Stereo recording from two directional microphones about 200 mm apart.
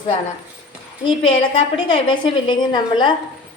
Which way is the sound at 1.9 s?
25° left (ahead or behind).